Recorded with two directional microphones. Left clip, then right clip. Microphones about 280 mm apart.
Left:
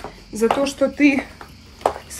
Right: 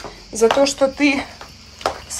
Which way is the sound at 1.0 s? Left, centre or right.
Centre.